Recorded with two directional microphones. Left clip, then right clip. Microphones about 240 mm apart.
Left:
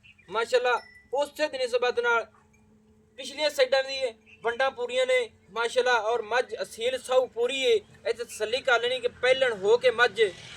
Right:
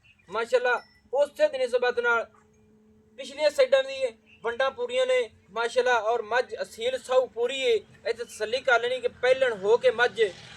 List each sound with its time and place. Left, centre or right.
0.3 s a man's voice: left